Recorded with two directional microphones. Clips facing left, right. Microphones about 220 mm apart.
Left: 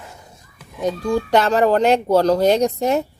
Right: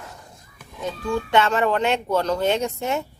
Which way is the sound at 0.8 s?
40° left (ahead or behind).